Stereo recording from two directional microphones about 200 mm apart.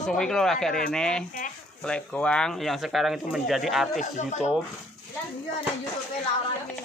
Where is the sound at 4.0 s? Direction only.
35° left (ahead or behind).